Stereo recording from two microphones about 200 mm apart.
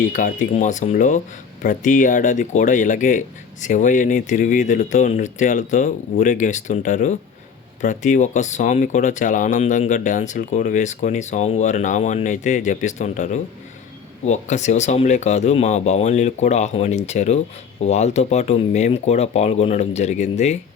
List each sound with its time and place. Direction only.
0.1 s speech: 40° left (ahead or behind)